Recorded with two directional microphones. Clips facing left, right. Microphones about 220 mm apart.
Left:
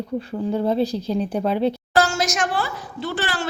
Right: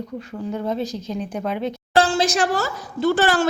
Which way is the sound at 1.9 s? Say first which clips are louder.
Right 7 dB; 30° right (ahead or behind).